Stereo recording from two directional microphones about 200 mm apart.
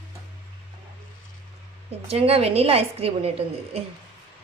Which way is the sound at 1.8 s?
30° right (ahead or behind).